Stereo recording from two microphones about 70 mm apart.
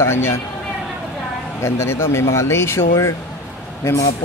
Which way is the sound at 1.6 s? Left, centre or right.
Left.